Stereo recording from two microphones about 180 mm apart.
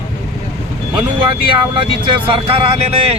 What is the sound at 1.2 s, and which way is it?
Speech, 30° right (ahead or behind).